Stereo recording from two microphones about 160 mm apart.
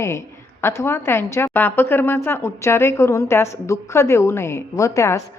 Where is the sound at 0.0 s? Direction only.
15° left (ahead or behind).